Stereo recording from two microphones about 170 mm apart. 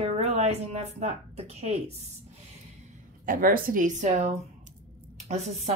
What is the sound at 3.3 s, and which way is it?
A woman's voice, 55° right (ahead or behind).